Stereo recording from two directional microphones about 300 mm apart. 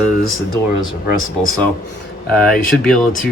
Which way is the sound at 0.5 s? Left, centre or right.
Left.